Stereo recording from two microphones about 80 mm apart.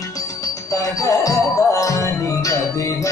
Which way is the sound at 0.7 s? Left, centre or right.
Left.